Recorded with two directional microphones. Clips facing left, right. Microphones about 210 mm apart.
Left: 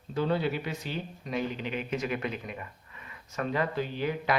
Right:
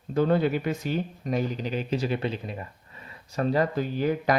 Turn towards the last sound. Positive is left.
turn(degrees=-40)  # may be behind; listen again after turning